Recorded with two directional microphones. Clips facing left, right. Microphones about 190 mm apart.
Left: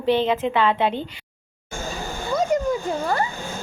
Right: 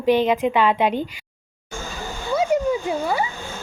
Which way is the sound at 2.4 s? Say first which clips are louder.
Right 2 dB; 10° right (ahead or behind).